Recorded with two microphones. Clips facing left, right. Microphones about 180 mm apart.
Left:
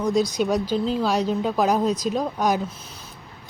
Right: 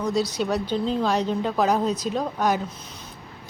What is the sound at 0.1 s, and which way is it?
Speech, 15° left (ahead or behind).